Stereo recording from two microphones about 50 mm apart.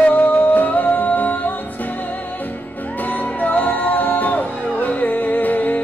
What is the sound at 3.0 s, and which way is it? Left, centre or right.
Music, left.